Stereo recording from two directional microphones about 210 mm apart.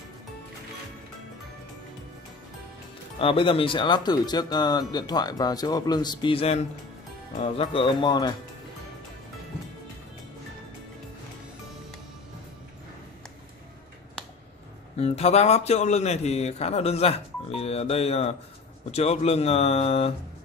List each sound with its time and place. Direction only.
3.2 s speech: 25° left (ahead or behind)
15.0 s speech: 30° left (ahead or behind)